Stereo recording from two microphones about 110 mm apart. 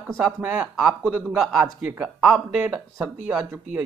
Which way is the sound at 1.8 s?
15° right (ahead or behind).